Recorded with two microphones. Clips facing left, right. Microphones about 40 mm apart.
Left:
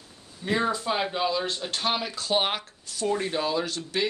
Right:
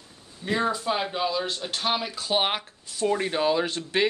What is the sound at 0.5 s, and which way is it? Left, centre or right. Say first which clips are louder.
Speech: even; centre.